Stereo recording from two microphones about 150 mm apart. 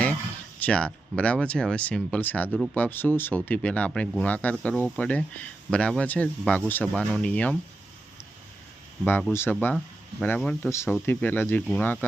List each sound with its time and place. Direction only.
0.6 s speech: 5° left (ahead or behind)
9.0 s speech: 15° left (ahead or behind)